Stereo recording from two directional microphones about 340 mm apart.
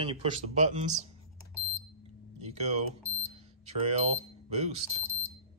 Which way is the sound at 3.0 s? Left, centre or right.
Centre.